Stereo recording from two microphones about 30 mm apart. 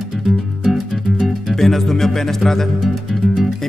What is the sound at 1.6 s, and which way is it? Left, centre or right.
Music, centre.